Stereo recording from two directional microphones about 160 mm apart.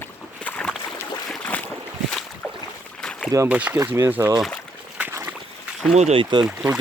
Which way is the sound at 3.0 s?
5° left (ahead or behind).